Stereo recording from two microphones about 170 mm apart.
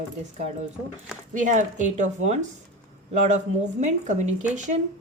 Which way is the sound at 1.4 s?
45° right (ahead or behind).